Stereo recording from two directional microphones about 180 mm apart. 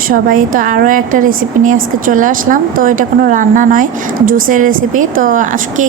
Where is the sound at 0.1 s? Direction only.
50° right (ahead or behind).